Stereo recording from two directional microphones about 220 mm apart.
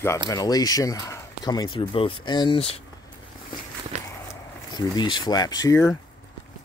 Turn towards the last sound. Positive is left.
turn(degrees=15)  # may be behind; listen again after turning